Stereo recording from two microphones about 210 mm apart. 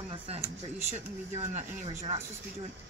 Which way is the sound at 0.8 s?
30° right (ahead or behind).